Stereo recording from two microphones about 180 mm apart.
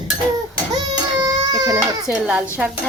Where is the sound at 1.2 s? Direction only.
20° right (ahead or behind).